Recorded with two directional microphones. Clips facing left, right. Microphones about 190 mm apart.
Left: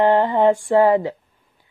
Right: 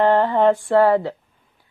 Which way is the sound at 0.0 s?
15° left (ahead or behind).